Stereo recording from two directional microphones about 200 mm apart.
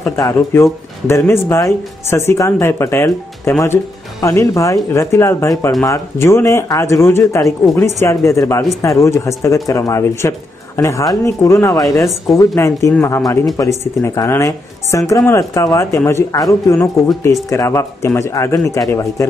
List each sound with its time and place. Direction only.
0.1 s speech: 15° left (ahead or behind)